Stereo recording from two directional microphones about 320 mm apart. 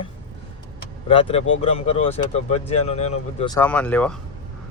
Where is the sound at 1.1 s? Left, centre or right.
Centre.